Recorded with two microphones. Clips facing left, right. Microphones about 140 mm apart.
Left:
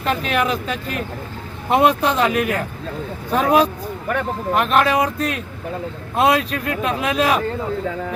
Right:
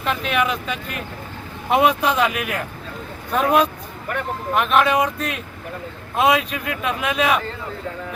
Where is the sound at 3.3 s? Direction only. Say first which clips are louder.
Left 2 dB; centre (ahead or behind).